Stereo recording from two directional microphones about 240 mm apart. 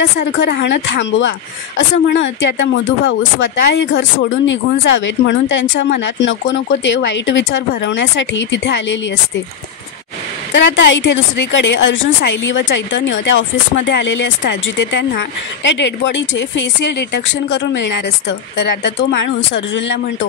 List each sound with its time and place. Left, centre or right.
0.2 s a woman's voice: left
10.5 s a woman's voice: left